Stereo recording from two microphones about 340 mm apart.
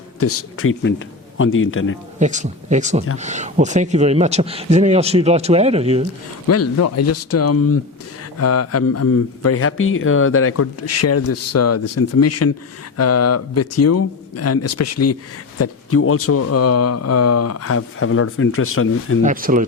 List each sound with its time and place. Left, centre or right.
0.2 s a man's voice: left
2.1 s speech: right
6.5 s speech: left
19.2 s speech: right